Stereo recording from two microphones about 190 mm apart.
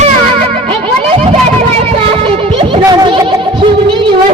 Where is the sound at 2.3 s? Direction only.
25° right (ahead or behind).